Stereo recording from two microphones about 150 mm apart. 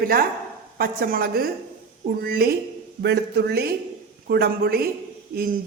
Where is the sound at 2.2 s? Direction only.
90° right.